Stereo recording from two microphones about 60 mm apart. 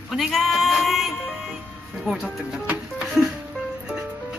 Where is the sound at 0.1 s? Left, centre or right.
Centre.